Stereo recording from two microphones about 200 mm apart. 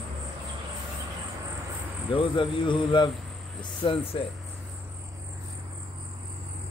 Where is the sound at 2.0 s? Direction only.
25° left (ahead or behind).